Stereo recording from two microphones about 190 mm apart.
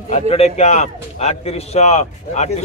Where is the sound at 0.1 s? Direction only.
35° left (ahead or behind).